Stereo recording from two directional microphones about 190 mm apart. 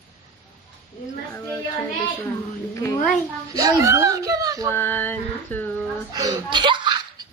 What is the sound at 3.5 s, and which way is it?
Speech, 20° right (ahead or behind).